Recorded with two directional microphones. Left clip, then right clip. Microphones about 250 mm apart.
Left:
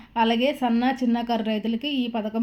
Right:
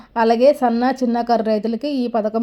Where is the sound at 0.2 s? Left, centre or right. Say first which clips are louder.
Right 8 dB; right.